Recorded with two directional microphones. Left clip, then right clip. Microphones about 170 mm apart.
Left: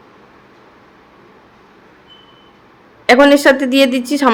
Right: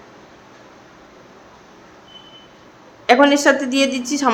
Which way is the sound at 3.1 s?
30° left (ahead or behind).